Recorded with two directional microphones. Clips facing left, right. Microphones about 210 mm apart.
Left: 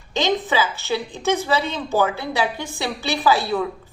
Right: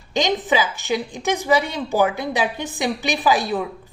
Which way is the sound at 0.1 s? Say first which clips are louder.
Right 1 dB; 15° right (ahead or behind).